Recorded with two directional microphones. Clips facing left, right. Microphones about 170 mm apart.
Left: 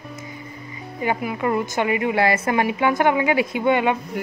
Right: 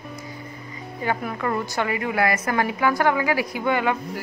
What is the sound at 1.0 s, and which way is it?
A woman's voice, 15° left (ahead or behind).